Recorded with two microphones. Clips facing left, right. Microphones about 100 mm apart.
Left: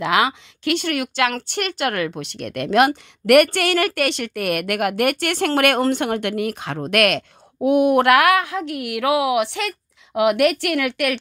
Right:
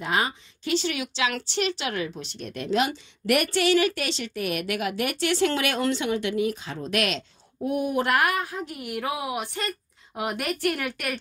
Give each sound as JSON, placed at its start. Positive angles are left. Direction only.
{"t": 0.0, "sound": "speech", "side_deg": 90}